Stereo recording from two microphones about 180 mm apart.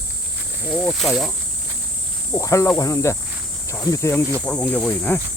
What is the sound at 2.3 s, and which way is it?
Speech, 15° left (ahead or behind).